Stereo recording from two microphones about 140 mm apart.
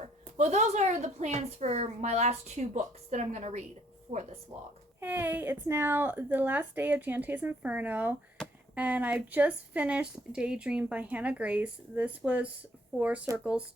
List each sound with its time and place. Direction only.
0.0 s a woman's voice: 55° right (ahead or behind)
4.9 s speech: 15° right (ahead or behind)